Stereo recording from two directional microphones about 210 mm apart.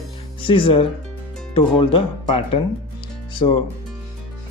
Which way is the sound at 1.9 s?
30° left (ahead or behind).